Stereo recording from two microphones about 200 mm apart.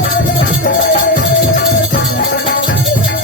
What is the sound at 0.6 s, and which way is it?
Music, 45° left (ahead or behind).